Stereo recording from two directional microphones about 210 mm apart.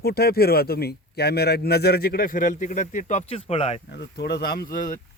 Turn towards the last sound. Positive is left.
turn(degrees=40)  # may be behind; listen again after turning